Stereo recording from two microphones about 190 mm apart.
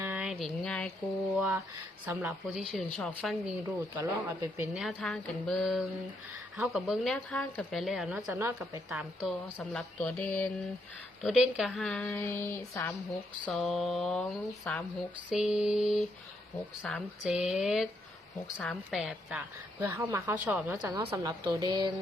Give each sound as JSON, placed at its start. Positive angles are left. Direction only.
{"t": 0.0, "sound": "a sound", "side_deg": -5}
{"t": 0.6, "sound": "a woman's voice", "side_deg": 5}
{"t": 2.0, "sound": "a woman's voice", "side_deg": -10}
{"t": 3.9, "sound": "a woman's voice", "side_deg": -15}
{"t": 11.2, "sound": "a woman's voice", "side_deg": -5}
{"t": 12.1, "sound": "a sound", "side_deg": 10}
{"t": 13.4, "sound": "a woman's voice", "side_deg": 0}
{"t": 15.3, "sound": "a woman's voice", "side_deg": -5}